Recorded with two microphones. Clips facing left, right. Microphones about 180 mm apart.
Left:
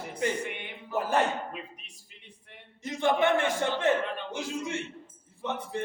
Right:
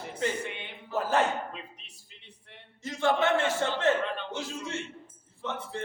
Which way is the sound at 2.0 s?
15° left (ahead or behind).